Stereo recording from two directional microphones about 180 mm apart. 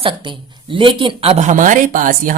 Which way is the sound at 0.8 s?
30° right (ahead or behind).